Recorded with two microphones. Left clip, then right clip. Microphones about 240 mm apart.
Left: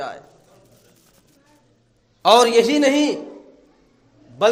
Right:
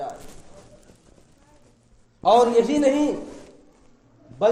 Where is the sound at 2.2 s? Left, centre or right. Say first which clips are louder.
Left 3 dB; left.